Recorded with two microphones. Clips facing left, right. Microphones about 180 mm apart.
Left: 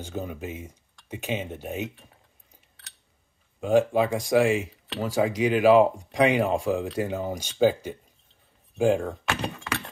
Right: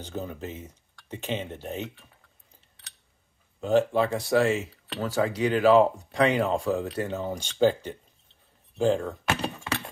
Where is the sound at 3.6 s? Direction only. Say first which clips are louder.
Left 1 dB; 10° left (ahead or behind).